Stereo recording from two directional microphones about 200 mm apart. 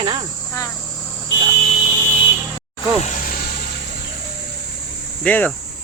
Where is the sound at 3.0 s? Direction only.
45° left (ahead or behind).